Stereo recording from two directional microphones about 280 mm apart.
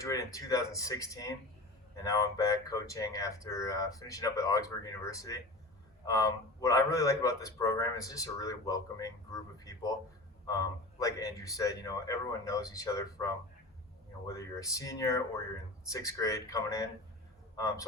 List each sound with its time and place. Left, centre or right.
0.0 s a man's voice: centre